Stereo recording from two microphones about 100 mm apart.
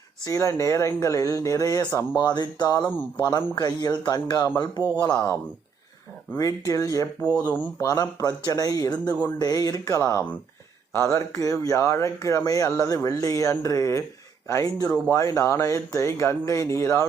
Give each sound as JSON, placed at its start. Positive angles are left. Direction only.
{"t": 0.3, "sound": "speech", "side_deg": 30}
{"t": 6.3, "sound": "speech", "side_deg": 35}
{"t": 7.3, "sound": "speech", "side_deg": 15}
{"t": 7.8, "sound": "speech", "side_deg": 35}